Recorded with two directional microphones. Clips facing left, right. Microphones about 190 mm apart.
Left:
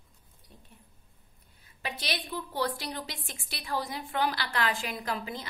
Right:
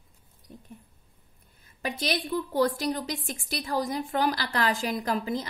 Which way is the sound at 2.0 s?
45° right (ahead or behind).